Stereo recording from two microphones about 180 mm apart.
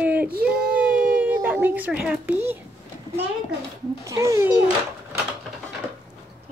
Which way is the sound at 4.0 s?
15° right (ahead or behind).